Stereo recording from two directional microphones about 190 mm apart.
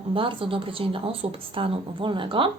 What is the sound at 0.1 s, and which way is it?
A woman's voice, 30° right (ahead or behind).